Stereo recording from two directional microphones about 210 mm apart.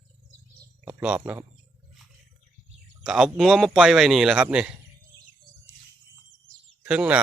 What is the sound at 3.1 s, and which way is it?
A man's voice, 5° right (ahead or behind).